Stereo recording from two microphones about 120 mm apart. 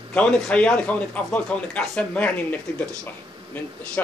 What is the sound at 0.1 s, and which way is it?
A man's voice, 10° left (ahead or behind).